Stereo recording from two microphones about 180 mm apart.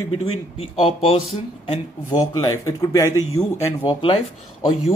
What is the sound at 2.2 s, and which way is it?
Speech, 20° left (ahead or behind).